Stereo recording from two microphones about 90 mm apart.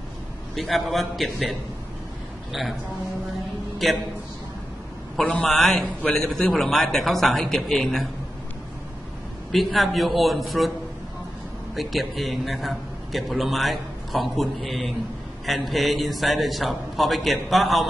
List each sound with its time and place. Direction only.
0.6 s a man's voice: centre (ahead or behind)
3.7 s a man's voice: centre (ahead or behind)
5.2 s a man's voice: 15° left (ahead or behind)
5.5 s a man's voice: 5° left (ahead or behind)
9.5 s a man's voice: centre (ahead or behind)
11.7 s a man's voice: centre (ahead or behind)